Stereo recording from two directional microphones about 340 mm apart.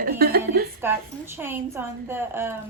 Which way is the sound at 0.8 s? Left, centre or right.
Centre.